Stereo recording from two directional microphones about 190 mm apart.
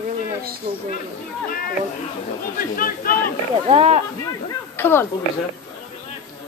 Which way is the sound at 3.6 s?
30° right (ahead or behind).